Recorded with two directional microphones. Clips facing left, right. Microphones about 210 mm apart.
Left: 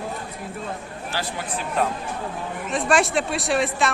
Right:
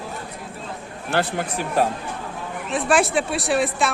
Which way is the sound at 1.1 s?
60° right (ahead or behind).